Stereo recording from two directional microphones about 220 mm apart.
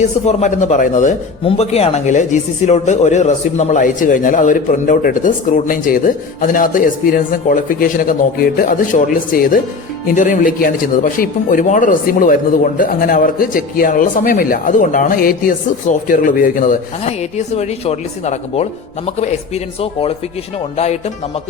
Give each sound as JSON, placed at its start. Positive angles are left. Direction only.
{"t": 0.0, "sound": "a man's voice", "side_deg": 30}